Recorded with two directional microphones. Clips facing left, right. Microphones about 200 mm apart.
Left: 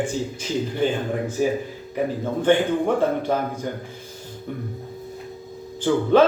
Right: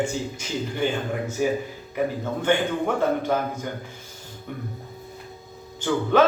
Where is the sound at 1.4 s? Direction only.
35° left (ahead or behind).